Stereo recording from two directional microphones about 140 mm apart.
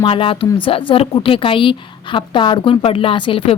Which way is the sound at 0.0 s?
40° left (ahead or behind).